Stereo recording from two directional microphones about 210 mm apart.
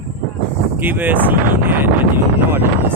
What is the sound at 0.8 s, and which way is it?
Speech, 10° right (ahead or behind).